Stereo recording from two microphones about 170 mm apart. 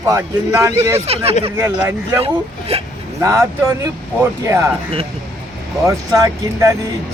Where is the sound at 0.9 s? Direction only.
35° right (ahead or behind).